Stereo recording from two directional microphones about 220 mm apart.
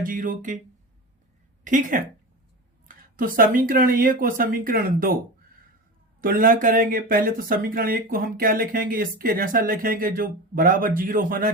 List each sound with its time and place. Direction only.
0.0 s speech: 40° right (ahead or behind)
1.6 s speech: 35° right (ahead or behind)
2.8 s a sound: 40° right (ahead or behind)
3.7 s speech: 40° right (ahead or behind)
6.2 s speech: 40° right (ahead or behind)